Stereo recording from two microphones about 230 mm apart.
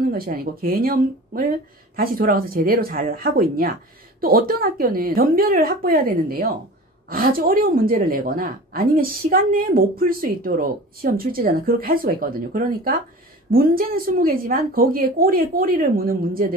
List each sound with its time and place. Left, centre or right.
0.1 s a woman's voice: right